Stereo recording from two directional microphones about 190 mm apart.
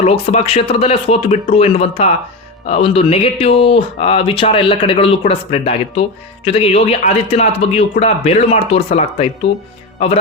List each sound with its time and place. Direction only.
0.0 s speech: 35° left (ahead or behind)